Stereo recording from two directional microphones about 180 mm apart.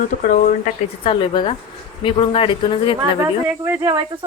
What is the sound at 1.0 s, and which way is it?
Speech, 25° left (ahead or behind).